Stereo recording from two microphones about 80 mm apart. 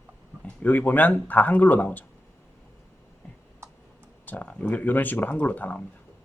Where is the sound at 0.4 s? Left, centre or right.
Left.